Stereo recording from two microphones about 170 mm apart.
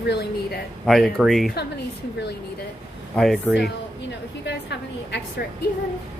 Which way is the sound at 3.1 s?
5° left (ahead or behind).